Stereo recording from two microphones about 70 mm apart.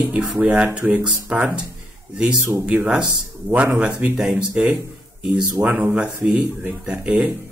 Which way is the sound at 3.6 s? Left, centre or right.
Centre.